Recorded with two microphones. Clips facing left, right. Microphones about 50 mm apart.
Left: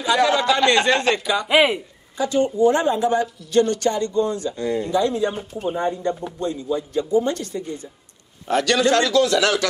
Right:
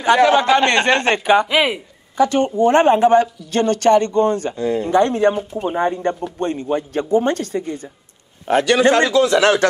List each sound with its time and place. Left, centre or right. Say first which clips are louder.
0.0 s speech: right 5 dB; right
1.5 s speech: left 1 dB; centre
2.1 s speech: right 4 dB; right
4.6 s speech: right 3 dB; right
4.8 s speech: right 7 dB; right
8.9 s speech: right 3 dB; right